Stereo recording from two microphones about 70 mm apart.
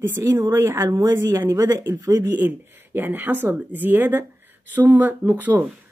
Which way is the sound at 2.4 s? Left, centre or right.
Right.